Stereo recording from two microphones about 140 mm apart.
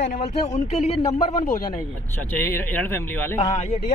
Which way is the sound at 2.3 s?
15° left (ahead or behind).